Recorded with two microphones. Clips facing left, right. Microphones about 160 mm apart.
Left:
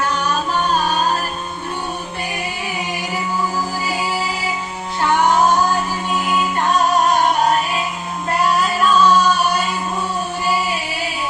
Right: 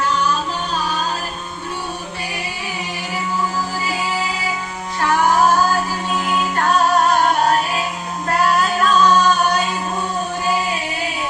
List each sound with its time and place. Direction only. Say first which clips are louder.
0.0 s music: right 1 dB; 55° left (ahead or behind)
5.3 s music: even; 20° left (ahead or behind)
8.6 s music: left 1 dB; 10° left (ahead or behind)